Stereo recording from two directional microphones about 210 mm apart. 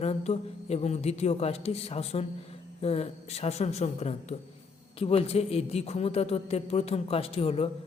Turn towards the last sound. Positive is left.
turn(degrees=25)  # may be behind; listen again after turning